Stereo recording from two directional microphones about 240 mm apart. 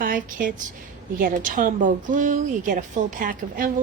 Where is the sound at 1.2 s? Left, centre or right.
Right.